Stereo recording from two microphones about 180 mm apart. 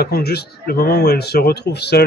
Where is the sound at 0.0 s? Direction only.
60° left (ahead or behind).